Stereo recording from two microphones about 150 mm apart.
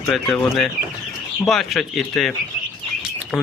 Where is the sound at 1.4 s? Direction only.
Centre (ahead or behind).